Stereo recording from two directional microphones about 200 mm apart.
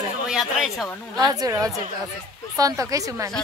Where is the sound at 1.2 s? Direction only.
20° right (ahead or behind).